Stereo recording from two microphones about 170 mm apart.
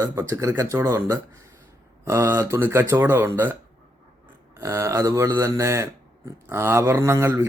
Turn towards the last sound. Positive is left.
turn(degrees=-15)  # may be behind; listen again after turning